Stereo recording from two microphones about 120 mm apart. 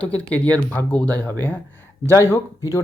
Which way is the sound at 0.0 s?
10° left (ahead or behind).